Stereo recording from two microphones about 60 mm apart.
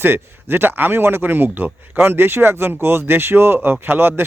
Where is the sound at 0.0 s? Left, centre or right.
Right.